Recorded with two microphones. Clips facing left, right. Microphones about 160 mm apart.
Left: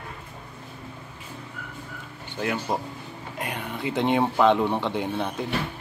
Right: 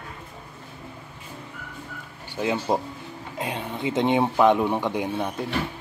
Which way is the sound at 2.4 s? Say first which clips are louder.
Right 3 dB; 20° right (ahead or behind).